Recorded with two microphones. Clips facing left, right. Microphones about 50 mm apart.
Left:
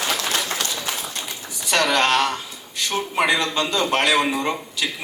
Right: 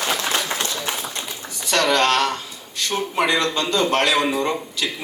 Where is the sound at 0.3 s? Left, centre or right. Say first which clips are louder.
Right 1 dB; right.